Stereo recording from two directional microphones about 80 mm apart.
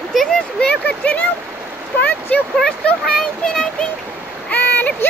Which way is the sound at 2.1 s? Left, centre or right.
Left.